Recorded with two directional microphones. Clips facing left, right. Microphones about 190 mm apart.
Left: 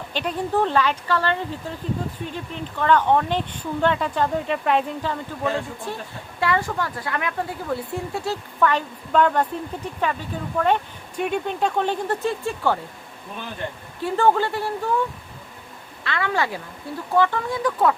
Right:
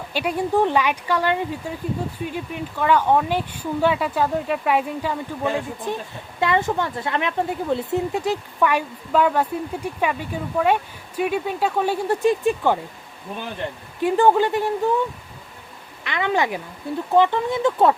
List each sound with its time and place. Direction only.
0.1 s speech: 10° right (ahead or behind)
14.0 s speech: 15° right (ahead or behind)
16.0 s speech: 20° right (ahead or behind)